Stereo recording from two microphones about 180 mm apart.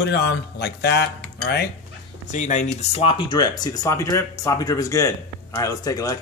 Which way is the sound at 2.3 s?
45° left (ahead or behind).